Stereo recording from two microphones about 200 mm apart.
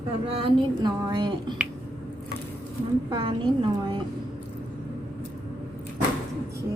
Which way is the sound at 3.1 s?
25° right (ahead or behind).